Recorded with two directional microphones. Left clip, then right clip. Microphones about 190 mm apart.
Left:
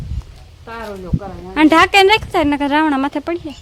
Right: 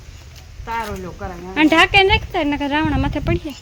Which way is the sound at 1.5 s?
15° left (ahead or behind).